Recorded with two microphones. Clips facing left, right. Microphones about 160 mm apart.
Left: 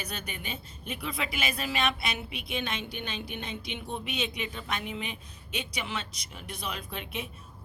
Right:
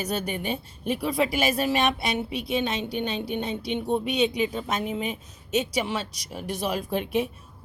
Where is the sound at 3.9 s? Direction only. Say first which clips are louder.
Right 10 dB; 35° right (ahead or behind).